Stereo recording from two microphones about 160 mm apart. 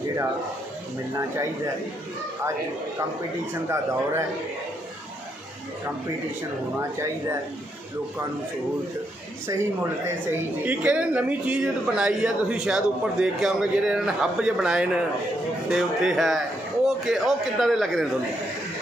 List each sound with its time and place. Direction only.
3.5 s a man's voice: 15° right (ahead or behind)
6.7 s a man's voice: 15° right (ahead or behind)
10.2 s a man's voice: 15° right (ahead or behind)